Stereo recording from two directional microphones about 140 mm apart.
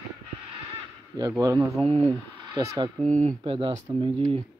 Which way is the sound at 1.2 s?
25° right (ahead or behind).